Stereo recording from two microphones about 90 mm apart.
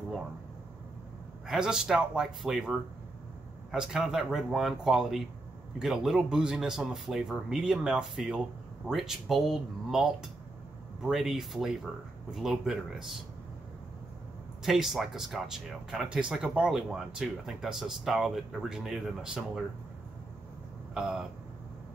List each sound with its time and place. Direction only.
1.5 s speech: 5° right (ahead or behind)
14.6 s speech: 5° right (ahead or behind)
20.9 s speech: 5° right (ahead or behind)